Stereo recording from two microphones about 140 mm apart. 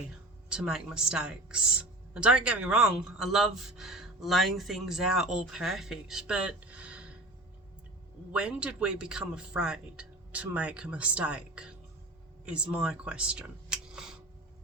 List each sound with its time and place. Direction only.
0.5 s speech: 5° right (ahead or behind)
8.3 s speech: 5° right (ahead or behind)